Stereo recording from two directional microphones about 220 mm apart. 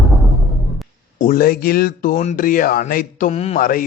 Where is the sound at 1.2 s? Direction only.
40° left (ahead or behind).